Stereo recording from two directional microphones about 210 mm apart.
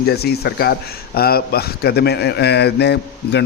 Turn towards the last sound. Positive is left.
turn(degrees=55)  # may be behind; listen again after turning